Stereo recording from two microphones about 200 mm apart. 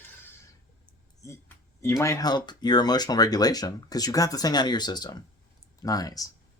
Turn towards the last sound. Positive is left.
turn(degrees=20)  # may be behind; listen again after turning